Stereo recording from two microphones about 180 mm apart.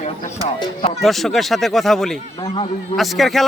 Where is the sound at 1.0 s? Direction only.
Centre (ahead or behind).